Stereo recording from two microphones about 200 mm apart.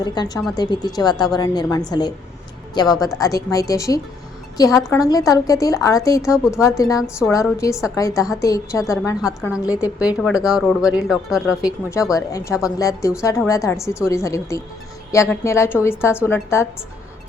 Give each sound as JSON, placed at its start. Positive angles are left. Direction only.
{"t": 0.0, "sound": "a woman's voice", "side_deg": 20}
{"t": 6.3, "sound": "speech", "side_deg": -5}
{"t": 6.6, "sound": "a woman's voice", "side_deg": 15}
{"t": 10.2, "sound": "speech", "side_deg": 0}
{"t": 11.6, "sound": "a woman's voice", "side_deg": 15}